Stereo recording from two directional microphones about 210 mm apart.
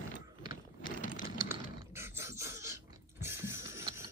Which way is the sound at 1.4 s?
10° right (ahead or behind).